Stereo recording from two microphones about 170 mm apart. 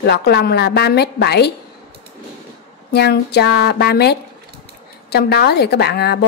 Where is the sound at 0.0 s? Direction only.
75° left (ahead or behind).